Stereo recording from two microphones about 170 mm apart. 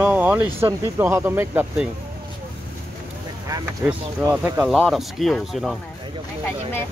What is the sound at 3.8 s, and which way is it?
Speech, 15° right (ahead or behind).